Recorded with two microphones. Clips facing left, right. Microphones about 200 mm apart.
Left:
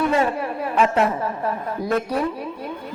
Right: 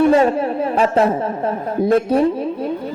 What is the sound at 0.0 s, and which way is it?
A woman's voice, 30° right (ahead or behind).